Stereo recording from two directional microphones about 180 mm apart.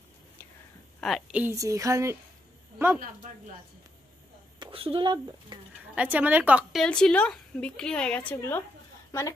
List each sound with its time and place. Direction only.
1.0 s a woman's voice: centre (ahead or behind)
1.4 s a woman's voice: 15° right (ahead or behind)
4.6 s speech: 30° right (ahead or behind)
5.9 s a woman's voice: 10° right (ahead or behind); by 8.6 s 10° left (ahead or behind)